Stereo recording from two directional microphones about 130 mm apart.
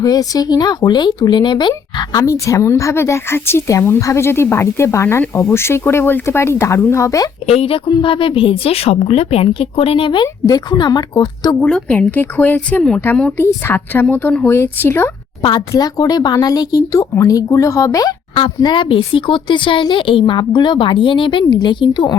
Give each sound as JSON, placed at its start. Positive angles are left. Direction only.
{"t": 0.0, "sound": "speech", "side_deg": 30}
{"t": 7.4, "sound": "speech", "side_deg": 50}
{"t": 7.9, "sound": "speech", "side_deg": 35}
{"t": 10.4, "sound": "speech", "side_deg": 30}
{"t": 11.6, "sound": "a woman's voice", "side_deg": 10}
{"t": 15.4, "sound": "a woman's voice", "side_deg": 40}
{"t": 18.3, "sound": "speech", "side_deg": 40}